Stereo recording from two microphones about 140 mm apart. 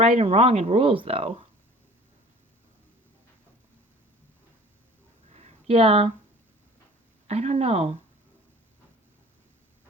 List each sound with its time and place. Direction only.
0.0 s speech: 45° right (ahead or behind)
5.3 s a sound: 50° right (ahead or behind)
7.3 s speech: 50° right (ahead or behind)